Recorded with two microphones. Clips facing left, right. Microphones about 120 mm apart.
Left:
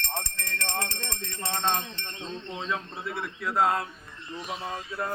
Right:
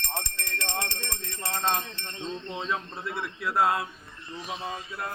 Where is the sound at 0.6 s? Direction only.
15° right (ahead or behind).